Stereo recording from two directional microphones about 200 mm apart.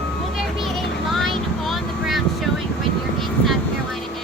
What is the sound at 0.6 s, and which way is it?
Vehicle, centre (ahead or behind).